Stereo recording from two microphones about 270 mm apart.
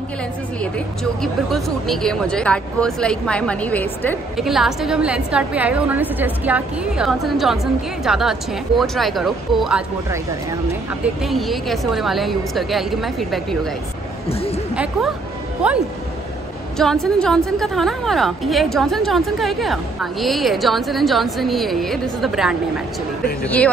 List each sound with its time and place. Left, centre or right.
0.6 s speech: centre
14.3 s speech: left
15.6 s speech: centre